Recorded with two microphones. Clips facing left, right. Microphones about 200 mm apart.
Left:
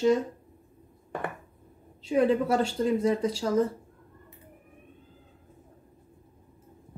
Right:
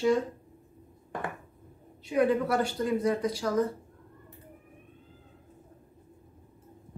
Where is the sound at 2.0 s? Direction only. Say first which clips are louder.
Left 2 dB; 25° left (ahead or behind).